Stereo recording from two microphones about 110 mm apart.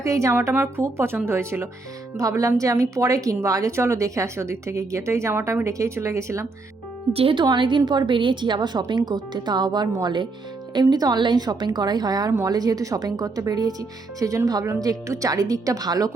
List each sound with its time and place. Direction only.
0.0 s speech: 30° right (ahead or behind)
7.1 s speech: 60° right (ahead or behind)
7.3 s speech: 45° right (ahead or behind)